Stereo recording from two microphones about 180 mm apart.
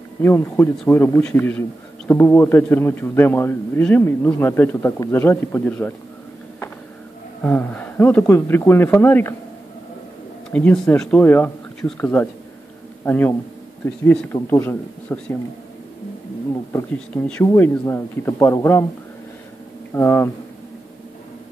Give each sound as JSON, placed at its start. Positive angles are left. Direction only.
{"t": 0.2, "sound": "a man's voice", "side_deg": 15}
{"t": 7.4, "sound": "a man's voice", "side_deg": 10}
{"t": 10.5, "sound": "a man's voice", "side_deg": 10}
{"t": 16.7, "sound": "a man's voice", "side_deg": 10}
{"t": 19.9, "sound": "a man's voice", "side_deg": 15}